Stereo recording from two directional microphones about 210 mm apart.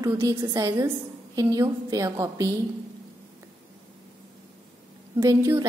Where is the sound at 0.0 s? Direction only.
15° right (ahead or behind).